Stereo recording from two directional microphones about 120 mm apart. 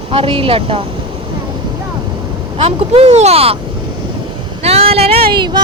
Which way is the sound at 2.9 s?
60° right (ahead or behind).